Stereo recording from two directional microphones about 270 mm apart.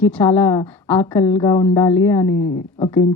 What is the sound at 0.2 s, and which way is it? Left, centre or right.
A woman's voice, centre.